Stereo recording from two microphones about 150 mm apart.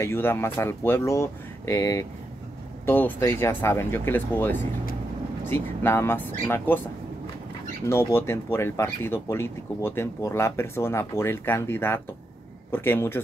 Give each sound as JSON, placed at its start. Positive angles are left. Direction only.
{"t": 0.0, "sound": "speech", "side_deg": 15}
{"t": 7.8, "sound": "speech", "side_deg": 20}